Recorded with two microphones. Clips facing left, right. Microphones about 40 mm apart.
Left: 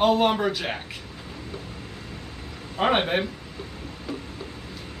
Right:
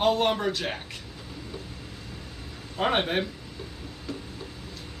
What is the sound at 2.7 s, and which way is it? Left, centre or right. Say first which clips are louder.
Speech: left 3 dB; centre.